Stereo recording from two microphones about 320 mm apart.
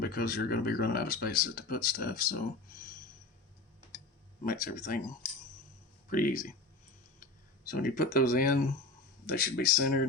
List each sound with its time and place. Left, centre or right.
0.0 s speech: left
4.4 s speech: left
6.1 s speech: left
7.7 s speech: left